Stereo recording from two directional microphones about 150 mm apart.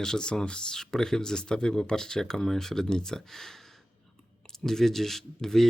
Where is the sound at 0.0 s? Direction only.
5° left (ahead or behind).